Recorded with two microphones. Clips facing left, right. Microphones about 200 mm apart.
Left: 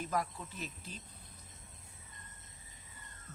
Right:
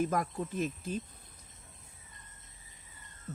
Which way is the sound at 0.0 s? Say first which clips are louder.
Right 6 dB; 50° right (ahead or behind).